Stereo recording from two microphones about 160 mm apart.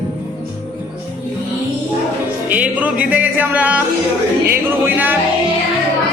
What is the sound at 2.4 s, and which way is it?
Music, 10° right (ahead or behind).